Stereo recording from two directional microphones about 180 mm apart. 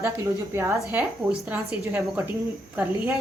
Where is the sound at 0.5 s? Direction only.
15° right (ahead or behind).